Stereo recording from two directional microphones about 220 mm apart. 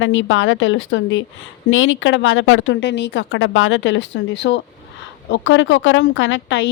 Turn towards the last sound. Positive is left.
turn(degrees=55)  # may be behind; listen again after turning